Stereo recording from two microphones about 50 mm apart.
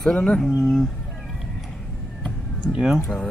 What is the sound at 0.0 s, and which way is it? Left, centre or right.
Speech, centre.